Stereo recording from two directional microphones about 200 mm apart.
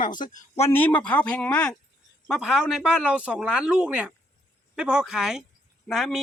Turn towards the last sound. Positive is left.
turn(degrees=0)  # may be behind; listen again after turning